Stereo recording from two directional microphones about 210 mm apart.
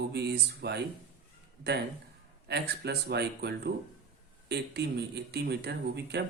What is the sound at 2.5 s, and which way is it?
Speech, 50° right (ahead or behind).